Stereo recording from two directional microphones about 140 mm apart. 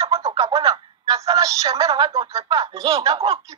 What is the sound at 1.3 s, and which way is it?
Speech, 25° right (ahead or behind).